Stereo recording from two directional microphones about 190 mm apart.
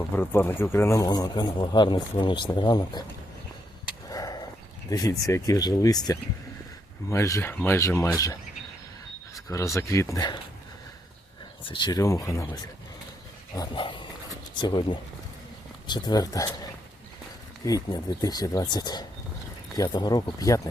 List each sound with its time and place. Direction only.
0.1 s speech: 10° left (ahead or behind)
4.1 s a sound: 20° left (ahead or behind)
4.9 s speech: 20° left (ahead or behind)
11.6 s speech: 25° left (ahead or behind)
17.7 s speech: 20° left (ahead or behind)